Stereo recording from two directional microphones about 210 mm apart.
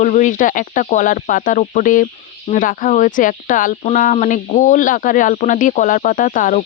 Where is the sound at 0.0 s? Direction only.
35° left (ahead or behind).